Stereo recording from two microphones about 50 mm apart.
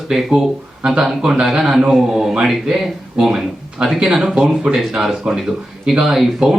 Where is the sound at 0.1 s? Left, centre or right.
Centre.